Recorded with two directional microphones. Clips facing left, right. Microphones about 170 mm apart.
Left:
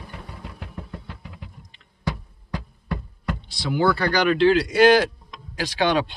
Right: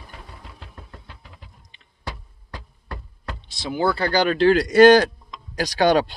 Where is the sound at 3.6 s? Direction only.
25° right (ahead or behind).